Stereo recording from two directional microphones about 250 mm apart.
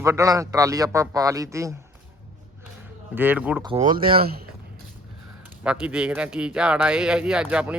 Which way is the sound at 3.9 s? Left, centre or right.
Right.